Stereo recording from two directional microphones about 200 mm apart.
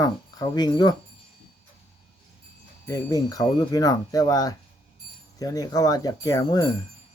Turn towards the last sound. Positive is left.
turn(degrees=20)  # may be behind; listen again after turning